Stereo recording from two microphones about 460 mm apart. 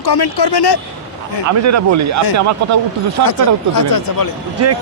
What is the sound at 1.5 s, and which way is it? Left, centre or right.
Speech, right.